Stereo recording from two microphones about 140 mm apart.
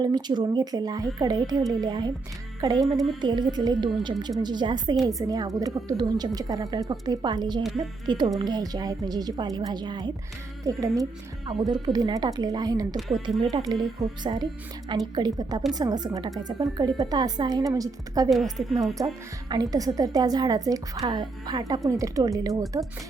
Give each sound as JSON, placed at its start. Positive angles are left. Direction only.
{"t": 0.0, "sound": "speech", "side_deg": -30}
{"t": 13.0, "sound": "a woman's voice", "side_deg": 0}
{"t": 13.5, "sound": "speech", "side_deg": -25}
{"t": 18.3, "sound": "a woman's voice", "side_deg": 0}
{"t": 18.8, "sound": "speech", "side_deg": -25}